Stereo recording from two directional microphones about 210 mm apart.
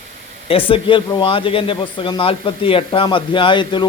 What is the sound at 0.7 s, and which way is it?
A man's voice, 25° left (ahead or behind).